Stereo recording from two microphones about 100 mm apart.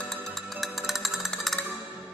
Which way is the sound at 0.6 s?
Centre (ahead or behind).